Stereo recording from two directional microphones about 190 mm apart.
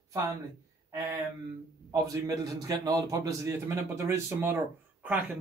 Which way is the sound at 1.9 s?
20° right (ahead or behind).